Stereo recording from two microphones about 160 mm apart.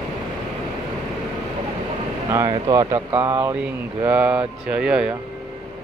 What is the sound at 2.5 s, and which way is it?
Speech, 25° right (ahead or behind).